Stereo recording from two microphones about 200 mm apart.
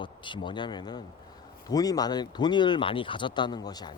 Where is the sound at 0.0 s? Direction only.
25° left (ahead or behind).